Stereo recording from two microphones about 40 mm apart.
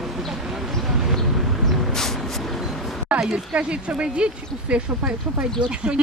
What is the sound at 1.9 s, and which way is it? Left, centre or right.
Vehicle, centre.